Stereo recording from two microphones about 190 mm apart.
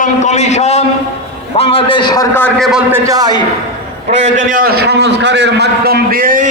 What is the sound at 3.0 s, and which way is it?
Speech, 20° right (ahead or behind).